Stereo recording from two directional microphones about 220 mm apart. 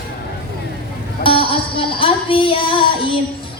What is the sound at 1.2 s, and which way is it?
Music, 25° left (ahead or behind).